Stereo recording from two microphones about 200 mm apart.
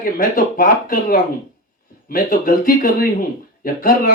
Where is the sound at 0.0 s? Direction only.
45° left (ahead or behind).